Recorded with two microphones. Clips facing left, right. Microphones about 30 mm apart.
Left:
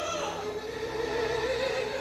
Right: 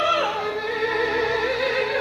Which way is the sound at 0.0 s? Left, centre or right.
Right.